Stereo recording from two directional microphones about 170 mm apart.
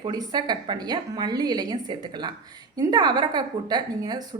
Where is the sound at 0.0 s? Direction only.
25° right (ahead or behind).